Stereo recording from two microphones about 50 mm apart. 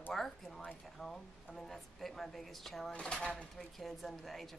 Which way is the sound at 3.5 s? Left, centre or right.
Centre.